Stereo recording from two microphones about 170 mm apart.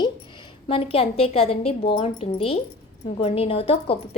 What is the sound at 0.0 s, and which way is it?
A woman's voice, 30° left (ahead or behind).